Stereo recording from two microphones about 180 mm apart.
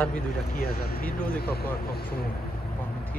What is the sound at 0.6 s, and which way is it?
Speech, 55° left (ahead or behind).